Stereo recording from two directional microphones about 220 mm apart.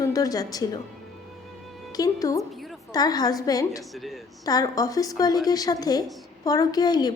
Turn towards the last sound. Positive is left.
turn(degrees=20)  # may be behind; listen again after turning